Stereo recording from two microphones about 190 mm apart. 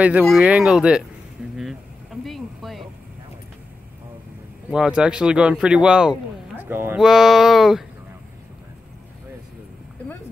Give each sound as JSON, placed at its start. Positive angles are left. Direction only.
{"t": 0.2, "sound": "speech", "side_deg": 0}
{"t": 1.6, "sound": "a sound", "side_deg": 0}
{"t": 4.6, "sound": "speech", "side_deg": -5}